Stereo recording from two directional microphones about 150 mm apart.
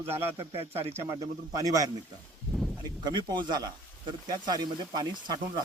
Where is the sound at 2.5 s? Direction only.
Centre (ahead or behind).